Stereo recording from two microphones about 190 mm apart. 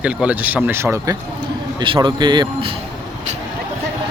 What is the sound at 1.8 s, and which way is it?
Speech, 25° right (ahead or behind).